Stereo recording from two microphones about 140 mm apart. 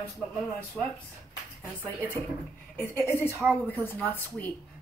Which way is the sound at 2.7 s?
15° left (ahead or behind).